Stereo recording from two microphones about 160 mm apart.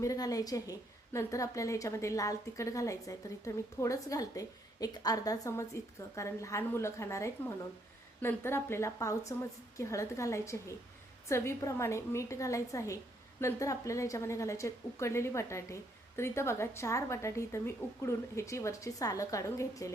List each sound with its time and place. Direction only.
0.0 s a woman's voice: 20° left (ahead or behind)